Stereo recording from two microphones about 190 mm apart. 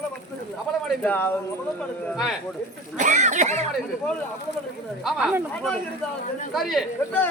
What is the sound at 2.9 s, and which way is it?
Speech, 40° right (ahead or behind).